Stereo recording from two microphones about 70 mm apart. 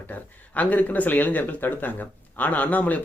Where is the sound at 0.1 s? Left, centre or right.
Left.